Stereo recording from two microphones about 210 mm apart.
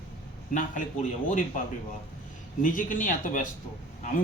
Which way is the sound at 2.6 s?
40° left (ahead or behind).